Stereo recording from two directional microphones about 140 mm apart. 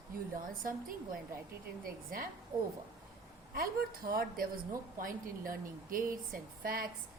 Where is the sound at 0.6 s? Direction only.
85° right.